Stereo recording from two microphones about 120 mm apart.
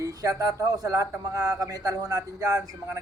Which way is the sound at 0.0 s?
30° right (ahead or behind).